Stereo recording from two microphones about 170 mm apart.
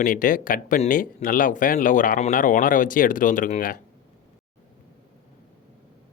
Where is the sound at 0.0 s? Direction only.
50° left (ahead or behind).